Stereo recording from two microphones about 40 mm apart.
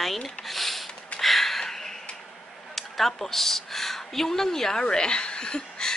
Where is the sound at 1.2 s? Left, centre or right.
Centre.